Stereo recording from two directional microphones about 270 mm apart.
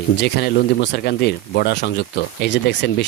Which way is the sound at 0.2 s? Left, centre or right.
Left.